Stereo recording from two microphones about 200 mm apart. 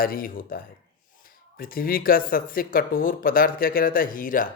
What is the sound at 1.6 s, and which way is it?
Speech, 45° left (ahead or behind).